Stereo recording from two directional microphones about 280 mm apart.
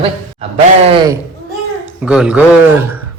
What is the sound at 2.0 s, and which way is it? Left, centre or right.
Speech, centre.